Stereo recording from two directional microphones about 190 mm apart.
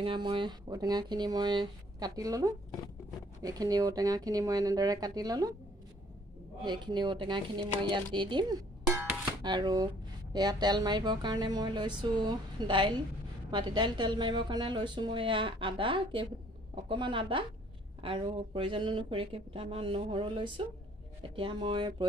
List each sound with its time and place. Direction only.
0.0 s speech: 25° right (ahead or behind)
6.6 s speech: 25° right (ahead or behind)